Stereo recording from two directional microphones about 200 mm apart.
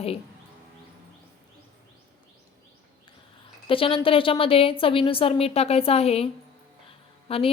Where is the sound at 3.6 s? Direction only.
25° left (ahead or behind).